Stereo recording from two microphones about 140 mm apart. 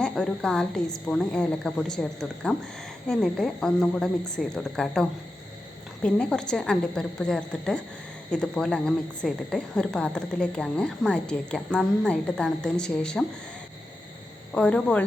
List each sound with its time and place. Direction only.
0.0 s a woman's voice: 5° left (ahead or behind)
14.5 s speech: 10° left (ahead or behind)